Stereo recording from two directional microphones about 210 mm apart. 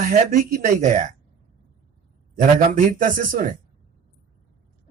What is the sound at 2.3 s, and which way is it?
Speech, 35° right (ahead or behind).